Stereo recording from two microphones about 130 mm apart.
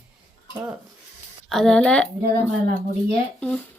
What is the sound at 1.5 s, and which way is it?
Speech, 5° left (ahead or behind).